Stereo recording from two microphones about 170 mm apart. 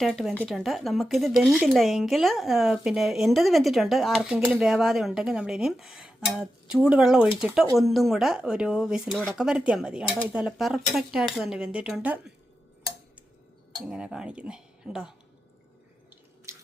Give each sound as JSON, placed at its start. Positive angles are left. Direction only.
{"t": 0.0, "sound": "speech", "side_deg": 0}
{"t": 13.8, "sound": "speech", "side_deg": -5}
{"t": 16.5, "sound": "drip", "side_deg": -20}